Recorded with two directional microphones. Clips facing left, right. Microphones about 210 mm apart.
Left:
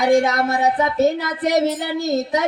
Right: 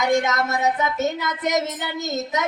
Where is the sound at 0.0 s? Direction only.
30° left (ahead or behind).